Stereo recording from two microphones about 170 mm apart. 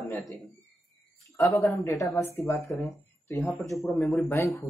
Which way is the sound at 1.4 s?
15° left (ahead or behind).